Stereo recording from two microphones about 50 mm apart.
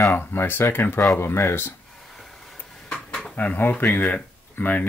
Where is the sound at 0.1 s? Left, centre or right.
Left.